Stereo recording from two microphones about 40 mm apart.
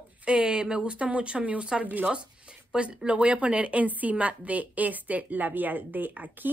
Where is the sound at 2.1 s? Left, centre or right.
Right.